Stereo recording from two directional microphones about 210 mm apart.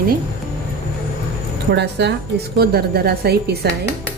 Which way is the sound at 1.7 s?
55° right (ahead or behind).